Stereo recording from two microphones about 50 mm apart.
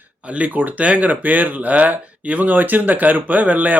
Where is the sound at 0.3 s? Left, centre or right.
Right.